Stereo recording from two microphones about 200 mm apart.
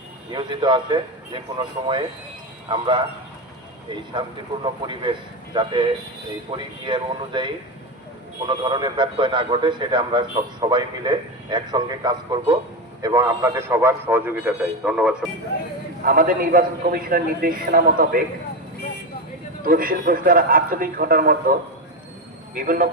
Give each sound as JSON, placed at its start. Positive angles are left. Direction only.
{"t": 0.3, "sound": "a man's voice", "side_deg": -25}
{"t": 2.6, "sound": "a man's voice", "side_deg": -25}
{"t": 4.2, "sound": "a man's voice", "side_deg": -25}
{"t": 16.0, "sound": "a man's voice", "side_deg": -45}
{"t": 19.6, "sound": "a man's voice", "side_deg": -45}
{"t": 22.5, "sound": "a man's voice", "side_deg": -45}